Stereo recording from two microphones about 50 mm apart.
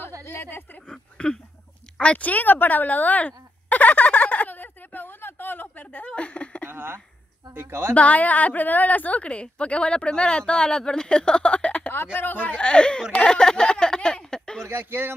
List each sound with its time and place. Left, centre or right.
0.2 s a woman's voice: left
0.8 s a sound: centre
2.0 s fowl: left
6.7 s a sound: right
7.5 s speech: right
7.9 s a woman's voice: left
11.9 s speech: left
12.5 s a woman's voice: centre
13.1 s a sound: centre
14.7 s speech: right